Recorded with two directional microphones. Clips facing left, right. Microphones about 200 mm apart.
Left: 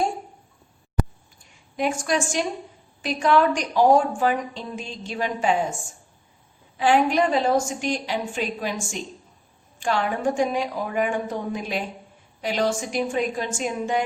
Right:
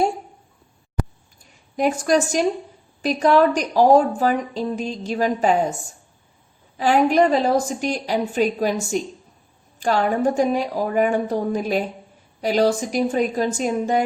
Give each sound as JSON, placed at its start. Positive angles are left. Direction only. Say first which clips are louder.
{"t": 1.7, "sound": "a woman's voice", "louder": "right 5 dB", "side_deg": -40}
{"t": 6.7, "sound": "a woman's voice", "louder": "right 3 dB", "side_deg": -40}